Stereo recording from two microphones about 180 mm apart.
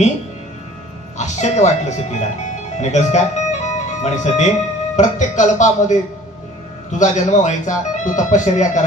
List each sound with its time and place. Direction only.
1.1 s speech: 40° left (ahead or behind)